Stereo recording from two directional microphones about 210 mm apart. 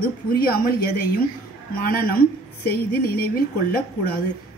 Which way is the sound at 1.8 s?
45° left (ahead or behind).